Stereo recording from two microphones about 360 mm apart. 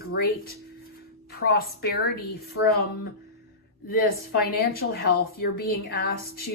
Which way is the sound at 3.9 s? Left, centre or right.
Left.